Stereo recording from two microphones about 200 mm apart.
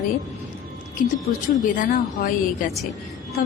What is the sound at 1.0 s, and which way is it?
A woman's voice, 45° left (ahead or behind).